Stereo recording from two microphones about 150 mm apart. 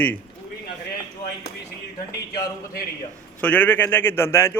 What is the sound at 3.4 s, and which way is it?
A man's voice, 10° left (ahead or behind).